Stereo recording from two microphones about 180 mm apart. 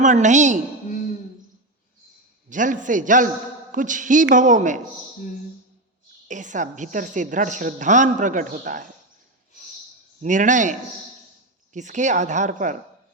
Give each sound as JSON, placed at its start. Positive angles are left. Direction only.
{"t": 0.0, "sound": "a woman's voice", "side_deg": -45}
{"t": 2.5, "sound": "a woman's voice", "side_deg": -45}
{"t": 6.2, "sound": "a woman's voice", "side_deg": -45}
{"t": 10.2, "sound": "a woman's voice", "side_deg": -45}